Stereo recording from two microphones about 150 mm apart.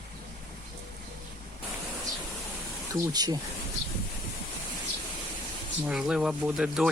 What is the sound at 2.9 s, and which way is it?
Speech, 25° right (ahead or behind).